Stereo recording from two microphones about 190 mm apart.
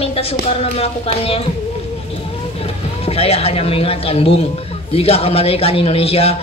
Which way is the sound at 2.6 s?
30° left (ahead or behind).